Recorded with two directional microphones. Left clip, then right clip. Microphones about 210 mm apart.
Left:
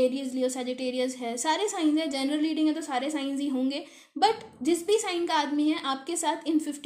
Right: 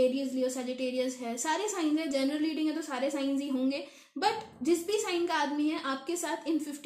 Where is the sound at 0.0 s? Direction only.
35° left (ahead or behind).